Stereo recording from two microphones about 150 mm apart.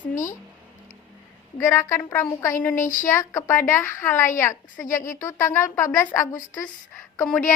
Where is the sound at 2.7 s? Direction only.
60° left (ahead or behind).